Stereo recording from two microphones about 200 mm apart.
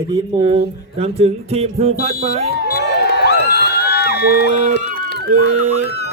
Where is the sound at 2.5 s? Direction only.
50° left (ahead or behind).